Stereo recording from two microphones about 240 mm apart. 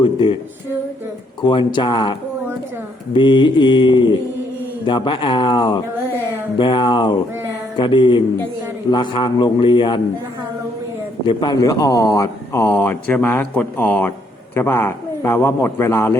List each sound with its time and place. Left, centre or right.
0.0 s speech: left
1.4 s a man's voice: centre
3.2 s a man's voice: centre
11.3 s speech: centre